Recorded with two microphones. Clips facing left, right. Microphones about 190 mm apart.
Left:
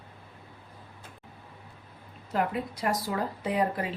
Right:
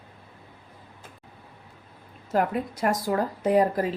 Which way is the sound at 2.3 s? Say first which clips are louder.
Right 4 dB; 50° right (ahead or behind).